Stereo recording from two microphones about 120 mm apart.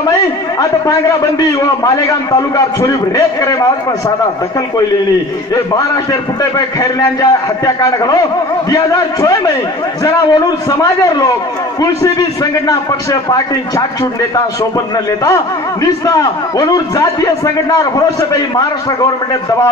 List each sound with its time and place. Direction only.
0.6 s a man's voice: 30° left (ahead or behind)
2.5 s a man's voice: 30° left (ahead or behind)
6.8 s a man's voice: 30° left (ahead or behind)
10.8 s a man's voice: 30° left (ahead or behind)
15.2 s a man's voice: 30° left (ahead or behind)